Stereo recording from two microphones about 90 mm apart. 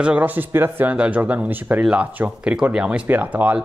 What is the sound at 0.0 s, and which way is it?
A man's voice, 15° right (ahead or behind).